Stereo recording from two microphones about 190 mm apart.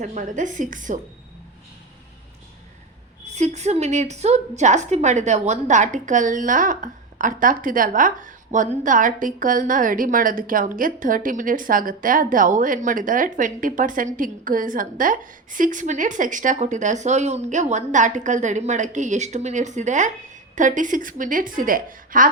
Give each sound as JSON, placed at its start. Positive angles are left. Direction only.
{"t": 0.0, "sound": "a woman's voice", "side_deg": -40}
{"t": 3.3, "sound": "a woman's voice", "side_deg": -35}